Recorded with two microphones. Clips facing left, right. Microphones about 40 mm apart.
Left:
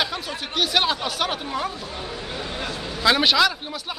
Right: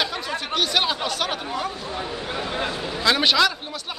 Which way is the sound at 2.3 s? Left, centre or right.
Right.